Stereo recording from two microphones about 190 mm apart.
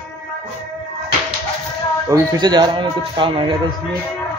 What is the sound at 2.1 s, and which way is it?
Speech, 20° right (ahead or behind).